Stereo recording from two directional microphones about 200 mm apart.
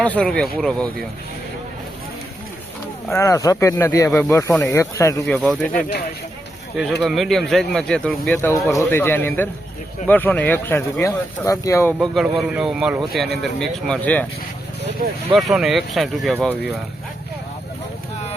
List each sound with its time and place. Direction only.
0.0 s speech: 5° left (ahead or behind)
3.1 s speech: 15° left (ahead or behind)
7.0 s speech: centre (ahead or behind)
11.9 s speech: centre (ahead or behind)
15.3 s speech: centre (ahead or behind)